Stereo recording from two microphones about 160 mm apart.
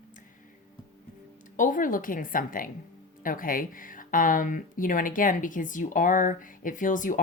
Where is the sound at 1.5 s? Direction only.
55° left (ahead or behind).